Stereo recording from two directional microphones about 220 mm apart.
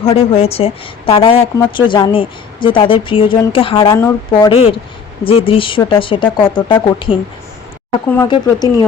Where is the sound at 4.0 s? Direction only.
15° left (ahead or behind).